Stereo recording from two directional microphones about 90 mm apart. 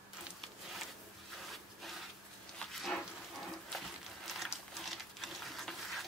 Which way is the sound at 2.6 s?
Centre (ahead or behind).